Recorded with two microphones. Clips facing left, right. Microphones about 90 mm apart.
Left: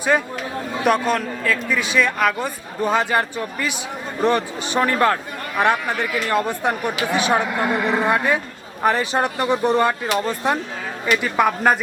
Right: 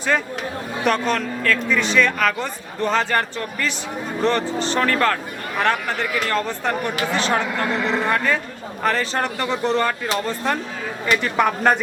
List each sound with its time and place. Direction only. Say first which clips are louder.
0.1 s speech: left 2 dB; 15° left (ahead or behind)